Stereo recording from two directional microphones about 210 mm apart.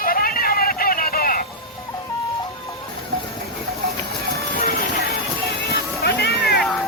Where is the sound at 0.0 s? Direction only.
45° left (ahead or behind).